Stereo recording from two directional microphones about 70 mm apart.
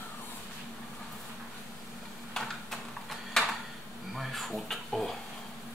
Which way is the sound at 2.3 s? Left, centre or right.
Centre.